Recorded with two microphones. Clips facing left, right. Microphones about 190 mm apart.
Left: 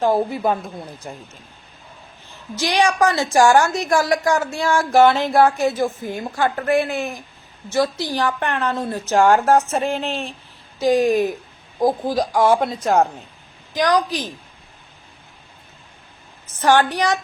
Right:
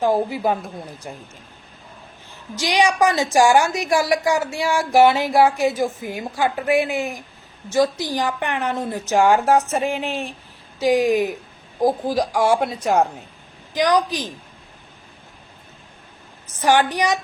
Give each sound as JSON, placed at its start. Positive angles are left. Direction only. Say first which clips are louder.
{"t": 0.0, "sound": "speech", "louder": "left 1 dB", "side_deg": -10}
{"t": 2.6, "sound": "speech", "louder": "even", "side_deg": -15}
{"t": 16.6, "sound": "speech", "louder": "left 1 dB", "side_deg": -15}